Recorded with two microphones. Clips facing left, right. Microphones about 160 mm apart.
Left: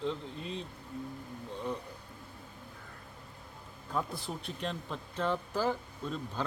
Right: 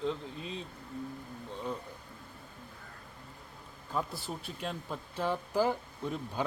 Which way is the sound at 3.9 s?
Centre (ahead or behind).